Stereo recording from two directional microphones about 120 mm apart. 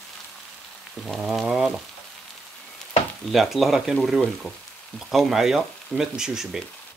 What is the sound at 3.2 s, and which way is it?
Speech, centre (ahead or behind).